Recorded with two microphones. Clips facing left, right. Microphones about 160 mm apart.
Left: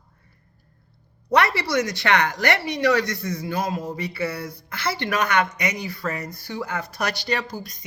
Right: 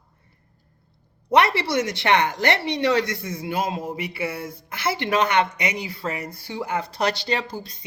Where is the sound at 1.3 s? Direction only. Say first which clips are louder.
Right 2 dB; 25° right (ahead or behind).